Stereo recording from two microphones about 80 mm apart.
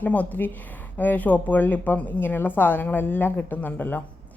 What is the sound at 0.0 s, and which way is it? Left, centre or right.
A woman's voice, centre.